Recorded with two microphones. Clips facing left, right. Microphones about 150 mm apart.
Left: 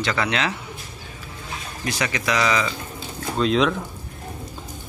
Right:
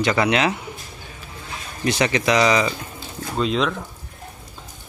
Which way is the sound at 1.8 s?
25° right (ahead or behind).